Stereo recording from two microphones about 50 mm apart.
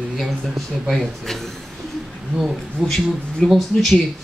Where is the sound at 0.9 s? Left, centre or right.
Centre.